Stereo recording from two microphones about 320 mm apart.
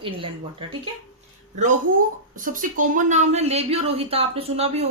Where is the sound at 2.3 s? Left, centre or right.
Right.